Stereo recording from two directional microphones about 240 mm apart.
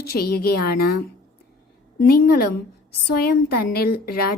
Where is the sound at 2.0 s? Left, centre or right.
Left.